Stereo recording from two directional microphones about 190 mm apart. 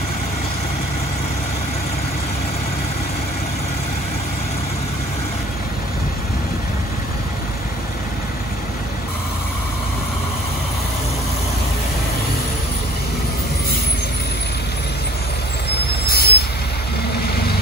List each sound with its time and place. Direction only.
16.1 s vehicle: 55° left (ahead or behind)